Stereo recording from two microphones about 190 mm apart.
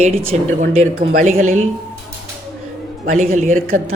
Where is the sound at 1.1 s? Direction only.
45° right (ahead or behind).